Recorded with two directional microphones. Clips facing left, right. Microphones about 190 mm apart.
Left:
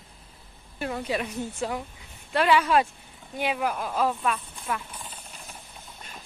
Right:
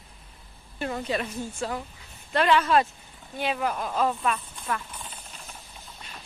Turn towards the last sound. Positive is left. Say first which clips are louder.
# even
turn(degrees=10)  # may be behind; listen again after turning